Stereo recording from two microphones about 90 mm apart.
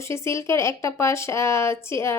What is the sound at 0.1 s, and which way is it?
Speech, 30° left (ahead or behind).